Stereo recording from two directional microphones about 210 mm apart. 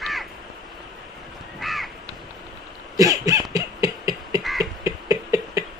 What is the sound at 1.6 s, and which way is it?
Crow, centre (ahead or behind).